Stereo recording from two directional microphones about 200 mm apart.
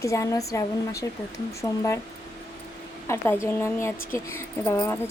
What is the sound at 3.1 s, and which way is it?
Speech, 15° left (ahead or behind).